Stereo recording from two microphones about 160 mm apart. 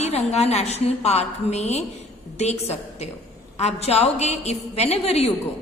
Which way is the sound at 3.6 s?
40° left (ahead or behind).